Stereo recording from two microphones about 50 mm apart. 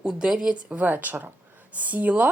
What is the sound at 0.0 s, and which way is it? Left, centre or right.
Speech, centre.